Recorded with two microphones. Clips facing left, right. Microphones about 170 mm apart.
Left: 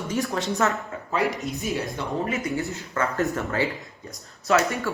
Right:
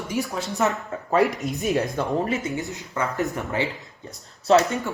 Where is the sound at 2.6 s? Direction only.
15° right (ahead or behind).